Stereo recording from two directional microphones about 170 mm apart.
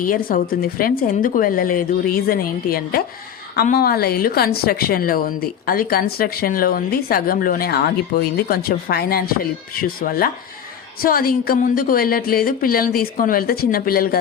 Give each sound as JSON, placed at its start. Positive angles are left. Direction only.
{"t": 0.1, "sound": "speech", "side_deg": 55}